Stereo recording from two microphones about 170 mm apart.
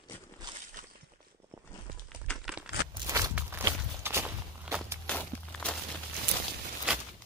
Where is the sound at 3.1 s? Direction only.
20° right (ahead or behind).